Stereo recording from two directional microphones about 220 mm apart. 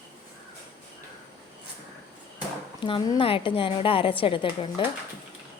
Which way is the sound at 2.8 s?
20° left (ahead or behind).